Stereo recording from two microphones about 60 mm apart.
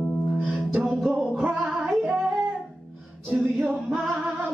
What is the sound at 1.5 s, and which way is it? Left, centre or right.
Music, centre.